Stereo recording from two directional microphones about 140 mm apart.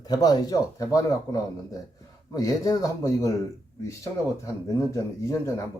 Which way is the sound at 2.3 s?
25° left (ahead or behind).